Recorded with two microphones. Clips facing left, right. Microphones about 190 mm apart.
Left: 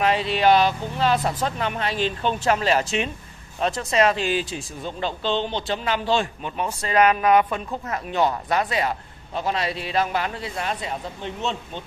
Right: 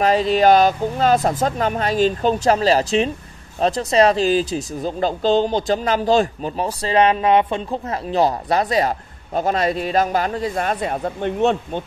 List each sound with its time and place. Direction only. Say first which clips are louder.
0.0 s speech: right 5 dB; 40° right (ahead or behind); by 11.8 s 55° right (ahead or behind)